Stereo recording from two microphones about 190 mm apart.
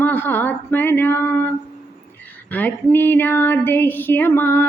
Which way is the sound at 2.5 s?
10° left (ahead or behind).